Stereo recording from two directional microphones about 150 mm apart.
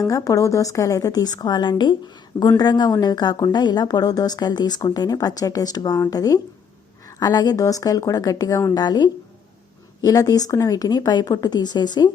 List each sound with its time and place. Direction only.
0.1 s a woman's voice: 20° left (ahead or behind)